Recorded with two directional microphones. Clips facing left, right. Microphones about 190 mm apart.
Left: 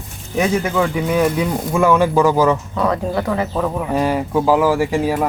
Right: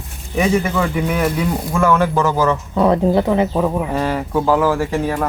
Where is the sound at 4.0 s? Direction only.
15° left (ahead or behind).